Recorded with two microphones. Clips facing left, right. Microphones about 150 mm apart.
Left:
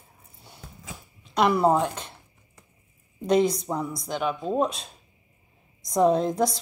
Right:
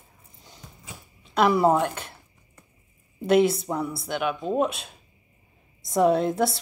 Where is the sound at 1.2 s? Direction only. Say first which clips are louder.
Right 1 dB; centre (ahead or behind).